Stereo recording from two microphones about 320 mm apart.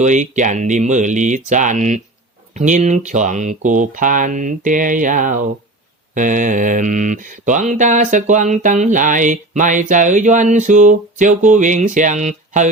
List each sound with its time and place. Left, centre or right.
0.0 s speech: right